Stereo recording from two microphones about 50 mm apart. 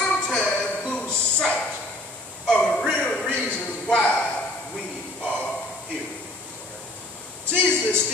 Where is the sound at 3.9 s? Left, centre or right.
Left.